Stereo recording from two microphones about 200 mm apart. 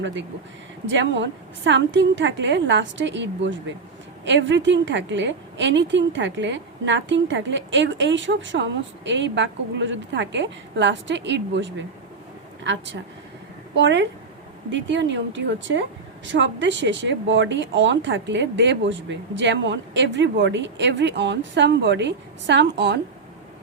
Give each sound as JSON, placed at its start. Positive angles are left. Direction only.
{"t": 0.0, "sound": "a woman's voice", "side_deg": -65}